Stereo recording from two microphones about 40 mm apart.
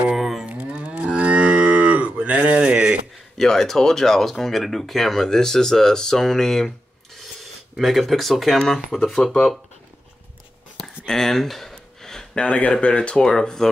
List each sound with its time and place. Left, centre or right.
0.1 s moo: centre
0.5 s livestock: right
3.3 s speech: centre
7.7 s speech: centre
9.2 s speech: centre
10.8 s a sound: centre
12.4 s speech: left; by 13.7 s centre